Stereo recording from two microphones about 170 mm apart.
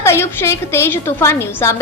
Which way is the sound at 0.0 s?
15° left (ahead or behind).